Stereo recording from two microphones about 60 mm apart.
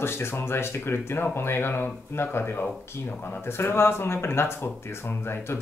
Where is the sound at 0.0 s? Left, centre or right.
Left.